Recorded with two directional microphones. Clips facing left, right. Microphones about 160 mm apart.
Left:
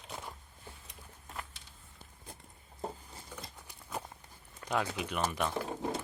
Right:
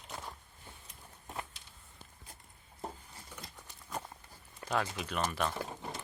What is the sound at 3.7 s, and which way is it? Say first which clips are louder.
Horse: even; 10° left (ahead or behind).